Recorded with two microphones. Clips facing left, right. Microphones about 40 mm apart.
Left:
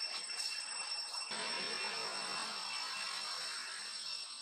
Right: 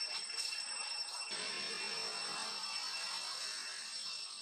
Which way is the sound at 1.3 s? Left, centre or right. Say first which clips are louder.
Left 3 dB; centre.